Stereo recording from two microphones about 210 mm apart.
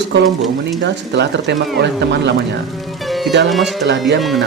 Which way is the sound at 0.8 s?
55° right (ahead or behind).